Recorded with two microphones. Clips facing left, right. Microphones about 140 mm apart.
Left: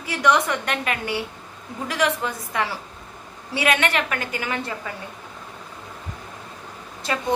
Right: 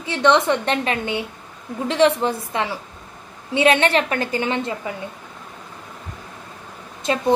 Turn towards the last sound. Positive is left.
turn(degrees=-25)  # may be behind; listen again after turning